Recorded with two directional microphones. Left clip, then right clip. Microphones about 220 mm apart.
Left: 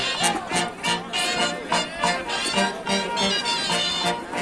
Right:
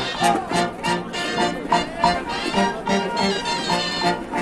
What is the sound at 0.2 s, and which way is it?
Music, 15° left (ahead or behind).